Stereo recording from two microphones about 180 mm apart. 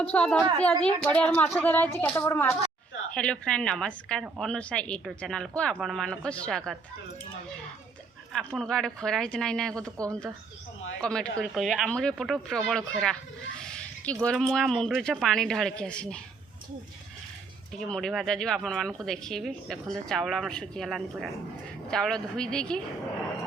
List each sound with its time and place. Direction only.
0.0 s a woman's voice: 5° left (ahead or behind)
8.3 s a woman's voice: centre (ahead or behind)
9.8 s speech: 20° right (ahead or behind)
11.0 s a woman's voice: 5° left (ahead or behind)
17.7 s a woman's voice: 5° left (ahead or behind)